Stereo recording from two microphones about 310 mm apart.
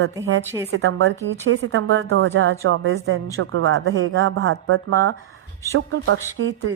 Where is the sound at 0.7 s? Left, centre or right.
Right.